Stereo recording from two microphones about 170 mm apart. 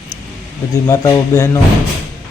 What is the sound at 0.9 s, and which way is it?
Speech, 20° left (ahead or behind).